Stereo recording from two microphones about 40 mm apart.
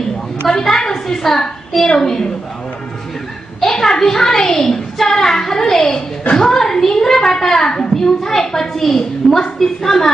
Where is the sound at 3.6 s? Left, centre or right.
Centre.